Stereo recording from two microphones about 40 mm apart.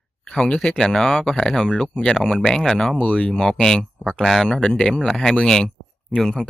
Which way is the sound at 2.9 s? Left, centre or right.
Left.